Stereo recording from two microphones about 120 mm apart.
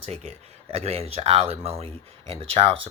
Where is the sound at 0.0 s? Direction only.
60° right (ahead or behind).